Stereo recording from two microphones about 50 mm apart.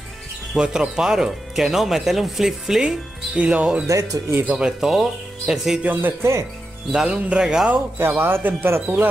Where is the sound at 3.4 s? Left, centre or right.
Right.